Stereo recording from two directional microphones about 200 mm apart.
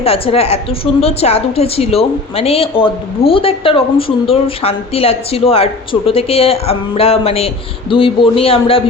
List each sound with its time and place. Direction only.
0.0 s speech: 30° left (ahead or behind)